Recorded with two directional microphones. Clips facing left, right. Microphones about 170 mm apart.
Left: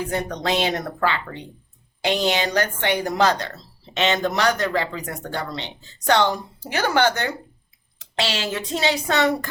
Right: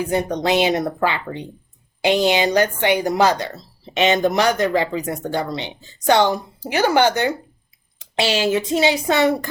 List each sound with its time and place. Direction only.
0.4 s a woman's voice: 10° right (ahead or behind)